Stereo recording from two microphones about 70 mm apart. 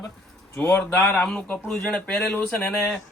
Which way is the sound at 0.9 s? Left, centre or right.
Centre.